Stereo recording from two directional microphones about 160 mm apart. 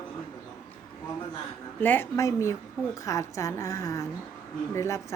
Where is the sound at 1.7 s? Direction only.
10° left (ahead or behind).